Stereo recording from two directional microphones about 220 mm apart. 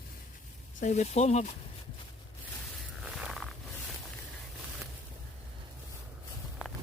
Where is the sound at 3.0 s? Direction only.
5° right (ahead or behind).